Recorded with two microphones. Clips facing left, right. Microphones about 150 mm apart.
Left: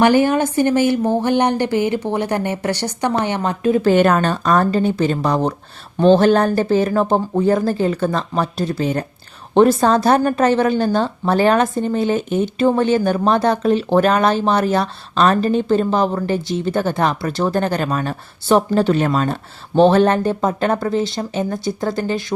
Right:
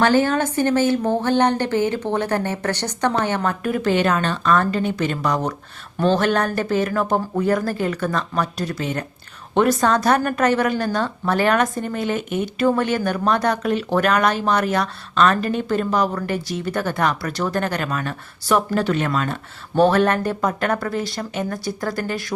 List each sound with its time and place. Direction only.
0.0 s speech: 15° left (ahead or behind)
3.9 s a woman's voice: 50° left (ahead or behind); by 22.2 s 25° left (ahead or behind)